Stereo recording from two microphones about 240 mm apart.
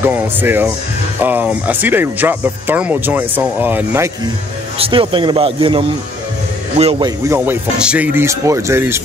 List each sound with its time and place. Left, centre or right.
0.0 s speech: centre
4.7 s a man's voice: right
7.2 s speech: centre